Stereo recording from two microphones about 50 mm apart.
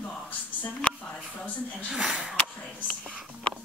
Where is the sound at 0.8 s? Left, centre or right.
Left.